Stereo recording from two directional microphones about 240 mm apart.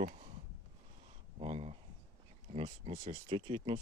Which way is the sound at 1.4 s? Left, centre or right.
Right.